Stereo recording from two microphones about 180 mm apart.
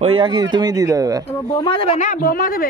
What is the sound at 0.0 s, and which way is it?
Speech, 25° right (ahead or behind).